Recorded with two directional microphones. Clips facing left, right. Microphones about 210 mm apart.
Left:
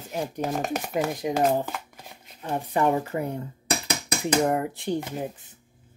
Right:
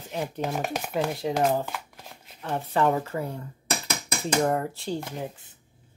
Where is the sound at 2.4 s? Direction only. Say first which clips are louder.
Even; 15° left (ahead or behind).